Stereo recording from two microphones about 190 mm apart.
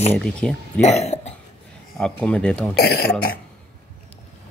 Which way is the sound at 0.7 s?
35° left (ahead or behind).